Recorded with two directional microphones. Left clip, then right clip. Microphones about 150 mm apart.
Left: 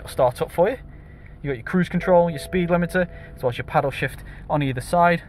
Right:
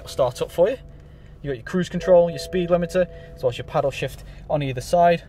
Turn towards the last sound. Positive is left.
turn(degrees=-20)  # may be behind; listen again after turning